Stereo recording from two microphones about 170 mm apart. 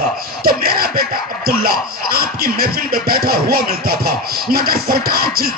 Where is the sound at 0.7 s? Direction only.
60° right (ahead or behind).